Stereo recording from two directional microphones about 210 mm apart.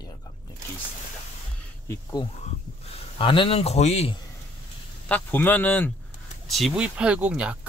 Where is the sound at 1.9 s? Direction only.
20° left (ahead or behind).